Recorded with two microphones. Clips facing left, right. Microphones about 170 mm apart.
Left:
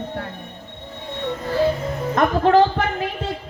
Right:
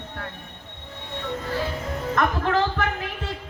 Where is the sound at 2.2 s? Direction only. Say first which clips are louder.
Left 8 dB; 20° left (ahead or behind).